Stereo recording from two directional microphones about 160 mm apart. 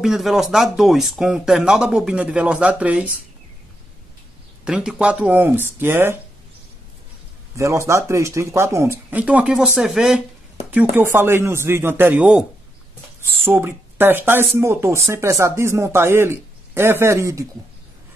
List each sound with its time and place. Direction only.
0.0 s speech: centre (ahead or behind)
4.6 s speech: 5° right (ahead or behind)
7.5 s speech: 20° right (ahead or behind)
13.5 s speech: 10° right (ahead or behind)